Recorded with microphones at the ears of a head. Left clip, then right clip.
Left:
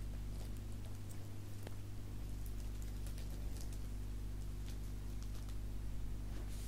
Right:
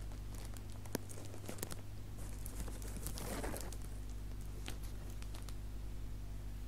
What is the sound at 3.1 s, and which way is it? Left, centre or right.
Bird, right.